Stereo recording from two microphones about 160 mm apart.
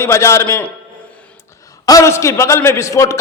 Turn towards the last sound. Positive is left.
turn(degrees=20)  # may be behind; listen again after turning